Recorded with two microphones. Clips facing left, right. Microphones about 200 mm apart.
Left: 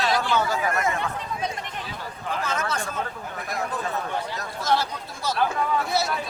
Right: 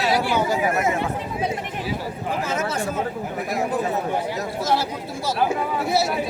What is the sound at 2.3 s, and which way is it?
Speech, 10° right (ahead or behind).